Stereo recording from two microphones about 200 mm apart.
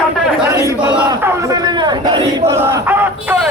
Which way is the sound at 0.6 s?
15° right (ahead or behind).